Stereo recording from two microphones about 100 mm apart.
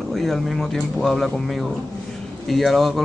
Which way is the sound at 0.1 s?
Centre (ahead or behind).